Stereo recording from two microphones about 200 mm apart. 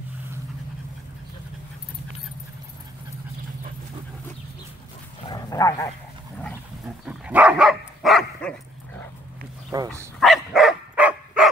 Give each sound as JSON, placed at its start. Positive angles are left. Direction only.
{"t": 5.2, "sound": "dog", "side_deg": 20}
{"t": 7.1, "sound": "dog", "side_deg": -5}
{"t": 9.7, "sound": "speech", "side_deg": -15}
{"t": 10.2, "sound": "dog", "side_deg": 0}